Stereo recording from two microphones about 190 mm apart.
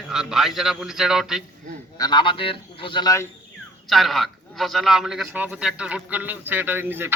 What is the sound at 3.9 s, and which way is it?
A man's voice, centre (ahead or behind).